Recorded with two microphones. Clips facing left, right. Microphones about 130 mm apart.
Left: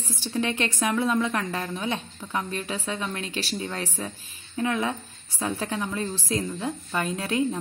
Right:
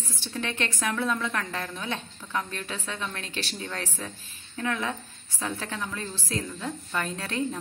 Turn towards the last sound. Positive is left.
turn(degrees=10)  # may be behind; listen again after turning